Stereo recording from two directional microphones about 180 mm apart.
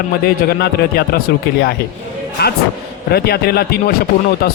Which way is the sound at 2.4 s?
65° left (ahead or behind).